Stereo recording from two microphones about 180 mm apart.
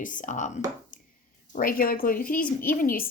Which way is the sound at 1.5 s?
50° left (ahead or behind).